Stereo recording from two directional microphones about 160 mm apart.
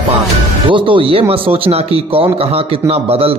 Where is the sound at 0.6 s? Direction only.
30° right (ahead or behind).